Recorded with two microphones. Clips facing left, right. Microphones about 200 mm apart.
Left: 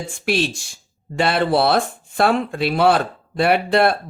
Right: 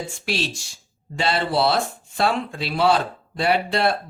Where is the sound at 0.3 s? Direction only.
55° left (ahead or behind).